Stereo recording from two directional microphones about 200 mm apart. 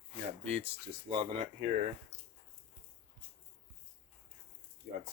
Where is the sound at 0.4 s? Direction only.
30° right (ahead or behind).